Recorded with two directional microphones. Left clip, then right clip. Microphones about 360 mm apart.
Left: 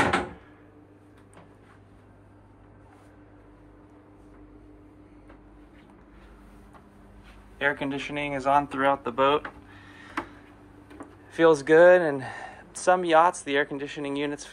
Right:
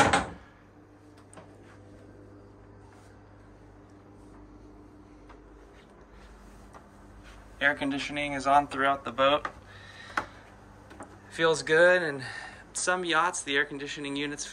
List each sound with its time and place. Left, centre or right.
7.5 s speech: centre
9.8 s neigh: centre
11.3 s speech: centre